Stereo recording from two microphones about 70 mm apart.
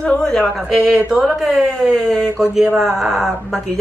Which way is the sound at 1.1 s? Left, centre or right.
Centre.